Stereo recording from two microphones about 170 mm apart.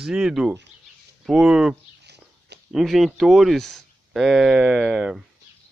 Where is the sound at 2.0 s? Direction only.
80° right.